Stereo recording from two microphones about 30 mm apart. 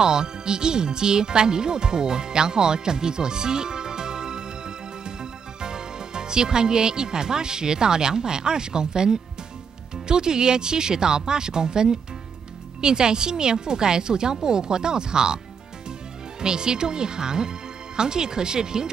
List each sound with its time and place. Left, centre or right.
0.0 s speech: right